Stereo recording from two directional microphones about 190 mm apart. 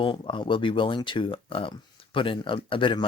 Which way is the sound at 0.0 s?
25° left (ahead or behind).